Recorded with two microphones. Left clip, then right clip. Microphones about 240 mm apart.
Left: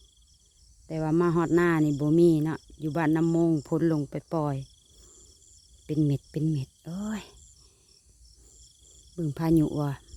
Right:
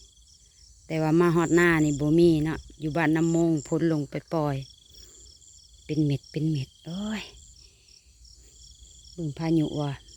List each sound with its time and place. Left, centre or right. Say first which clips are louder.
0.9 s speech: right 3 dB; centre
4.3 s cricket: right 3 dB; centre
5.8 s speech: even; centre
9.1 s speech: left 2 dB; left